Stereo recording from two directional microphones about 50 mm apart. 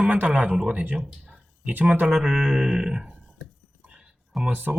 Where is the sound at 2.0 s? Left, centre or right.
Centre.